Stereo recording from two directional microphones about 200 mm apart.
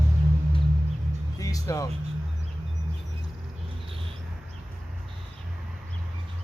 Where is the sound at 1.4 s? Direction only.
15° left (ahead or behind).